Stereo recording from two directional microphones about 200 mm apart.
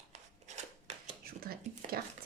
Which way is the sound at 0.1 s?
35° right (ahead or behind).